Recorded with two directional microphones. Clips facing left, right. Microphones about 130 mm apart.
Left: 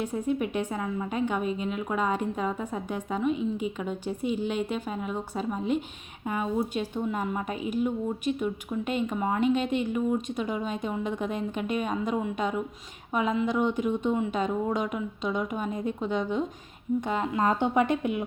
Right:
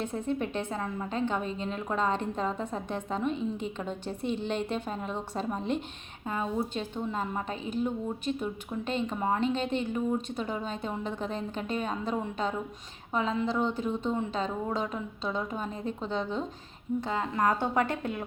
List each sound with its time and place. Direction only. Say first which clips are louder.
0.0 s a woman's voice: left 3 dB; 10° left (ahead or behind)